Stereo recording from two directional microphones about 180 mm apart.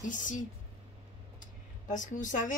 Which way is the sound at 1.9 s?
45° left (ahead or behind).